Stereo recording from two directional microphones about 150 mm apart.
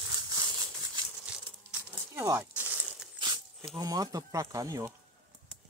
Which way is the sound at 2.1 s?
20° right (ahead or behind).